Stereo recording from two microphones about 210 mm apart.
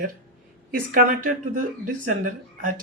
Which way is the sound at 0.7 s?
45° right (ahead or behind).